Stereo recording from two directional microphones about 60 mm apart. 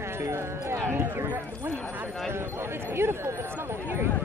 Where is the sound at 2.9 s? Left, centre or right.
Right.